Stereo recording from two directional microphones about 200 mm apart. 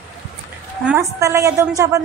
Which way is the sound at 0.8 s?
15° right (ahead or behind).